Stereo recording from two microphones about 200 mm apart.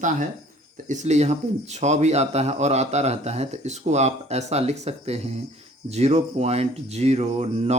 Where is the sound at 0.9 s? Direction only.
35° right (ahead or behind).